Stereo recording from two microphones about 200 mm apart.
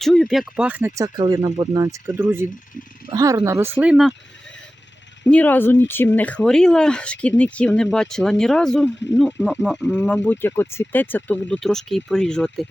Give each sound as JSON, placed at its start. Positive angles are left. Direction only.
{"t": 0.0, "sound": "speech", "side_deg": 0}